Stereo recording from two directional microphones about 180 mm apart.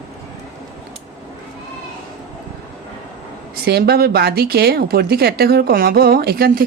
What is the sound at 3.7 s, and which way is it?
Speech, 60° right (ahead or behind).